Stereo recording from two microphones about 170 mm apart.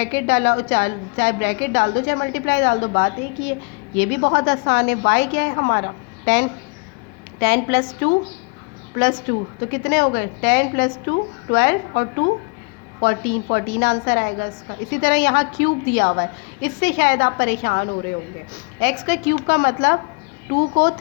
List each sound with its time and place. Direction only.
0.0 s a woman's voice: 70° left (ahead or behind)
9.6 s a woman's voice: 75° left (ahead or behind)